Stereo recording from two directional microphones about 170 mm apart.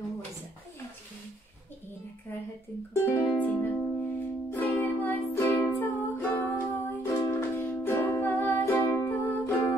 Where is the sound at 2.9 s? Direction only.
15° left (ahead or behind).